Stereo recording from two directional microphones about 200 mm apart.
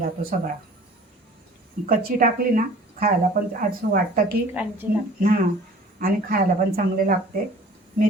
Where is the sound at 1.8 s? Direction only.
45° right (ahead or behind).